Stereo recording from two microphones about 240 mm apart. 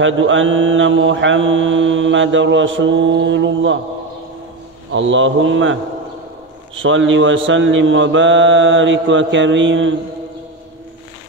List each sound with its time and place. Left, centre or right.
0.0 s mantra: right
4.9 s mantra: right